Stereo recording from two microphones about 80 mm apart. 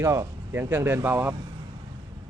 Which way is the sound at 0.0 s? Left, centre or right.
Right.